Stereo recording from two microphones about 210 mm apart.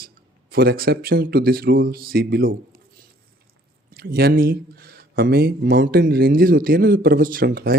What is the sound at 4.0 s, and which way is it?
Speech, 45° right (ahead or behind).